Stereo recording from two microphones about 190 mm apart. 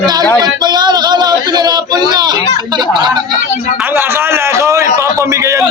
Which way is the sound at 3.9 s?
10° right (ahead or behind).